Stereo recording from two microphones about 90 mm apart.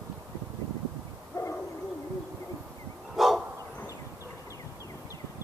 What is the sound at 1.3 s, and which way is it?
Bird, 35° left (ahead or behind).